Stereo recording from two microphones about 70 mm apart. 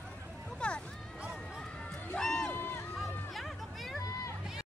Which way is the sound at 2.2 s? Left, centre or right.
Centre.